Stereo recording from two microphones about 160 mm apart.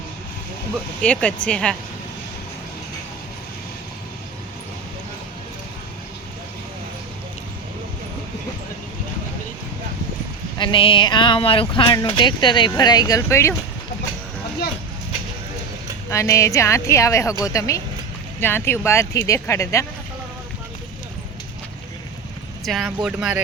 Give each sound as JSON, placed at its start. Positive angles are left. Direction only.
{"t": 1.0, "sound": "speech", "side_deg": 5}
{"t": 10.6, "sound": "speech", "side_deg": 30}
{"t": 16.0, "sound": "speech", "side_deg": 20}
{"t": 22.6, "sound": "speech", "side_deg": 0}